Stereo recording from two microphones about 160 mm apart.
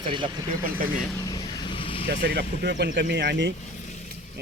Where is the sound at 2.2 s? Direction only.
90° right.